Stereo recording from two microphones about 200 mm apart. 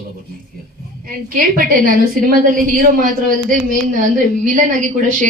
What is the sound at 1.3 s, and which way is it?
A woman's voice, 45° right (ahead or behind).